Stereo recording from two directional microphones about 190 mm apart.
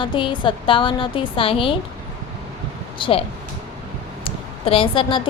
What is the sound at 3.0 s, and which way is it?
Speech, 30° left (ahead or behind).